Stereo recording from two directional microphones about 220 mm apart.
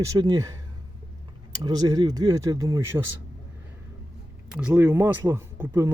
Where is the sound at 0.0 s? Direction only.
15° right (ahead or behind).